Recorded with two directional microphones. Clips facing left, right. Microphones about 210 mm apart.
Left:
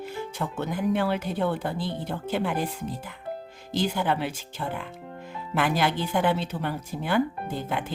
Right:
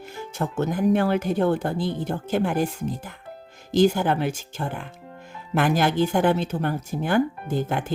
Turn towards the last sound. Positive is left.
turn(degrees=-45)  # may be behind; listen again after turning